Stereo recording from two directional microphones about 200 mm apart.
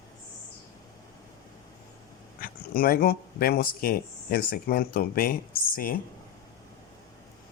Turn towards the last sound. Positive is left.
turn(degrees=45)  # may be behind; listen again after turning